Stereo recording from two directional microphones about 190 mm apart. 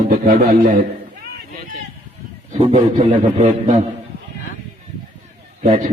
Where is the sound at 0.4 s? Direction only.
35° right (ahead or behind).